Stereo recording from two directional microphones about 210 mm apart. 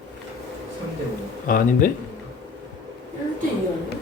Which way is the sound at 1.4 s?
40° left (ahead or behind).